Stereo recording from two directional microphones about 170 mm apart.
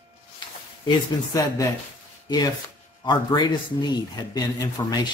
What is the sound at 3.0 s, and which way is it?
Speech, 25° left (ahead or behind).